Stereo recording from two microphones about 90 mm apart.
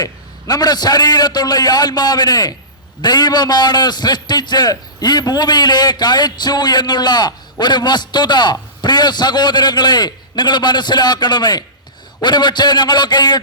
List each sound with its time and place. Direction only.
0.0 s a man's voice: 50° left (ahead or behind)